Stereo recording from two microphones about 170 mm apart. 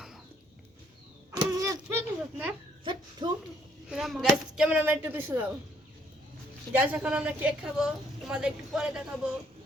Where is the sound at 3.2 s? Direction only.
30° right (ahead or behind).